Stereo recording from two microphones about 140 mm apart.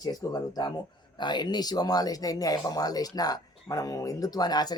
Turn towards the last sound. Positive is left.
turn(degrees=30)  # may be behind; listen again after turning